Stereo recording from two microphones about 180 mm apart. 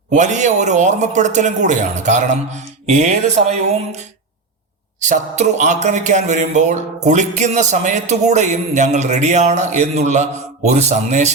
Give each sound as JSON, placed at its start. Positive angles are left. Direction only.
{"t": 0.1, "sound": "speech", "side_deg": -40}